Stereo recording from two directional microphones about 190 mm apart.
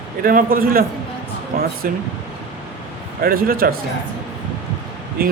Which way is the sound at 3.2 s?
50° right (ahead or behind).